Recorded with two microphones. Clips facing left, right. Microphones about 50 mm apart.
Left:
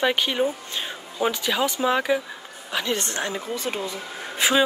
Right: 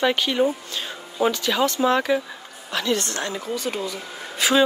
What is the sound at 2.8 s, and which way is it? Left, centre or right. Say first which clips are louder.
Speech: right 3 dB; left.